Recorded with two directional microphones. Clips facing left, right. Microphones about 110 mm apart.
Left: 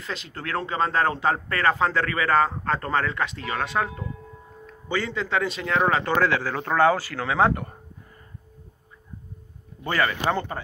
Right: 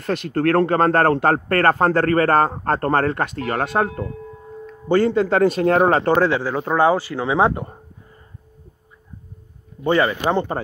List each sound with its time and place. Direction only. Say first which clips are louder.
0.0 s speech: right 14 dB; 55° right (ahead or behind)
6.1 s speech: right 5 dB; 25° right (ahead or behind)
9.8 s speech: right 6 dB; 25° right (ahead or behind)